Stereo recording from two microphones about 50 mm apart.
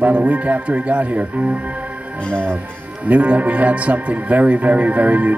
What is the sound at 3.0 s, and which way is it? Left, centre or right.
Speech, right.